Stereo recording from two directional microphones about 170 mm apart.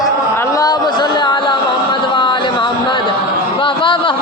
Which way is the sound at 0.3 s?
20° left (ahead or behind).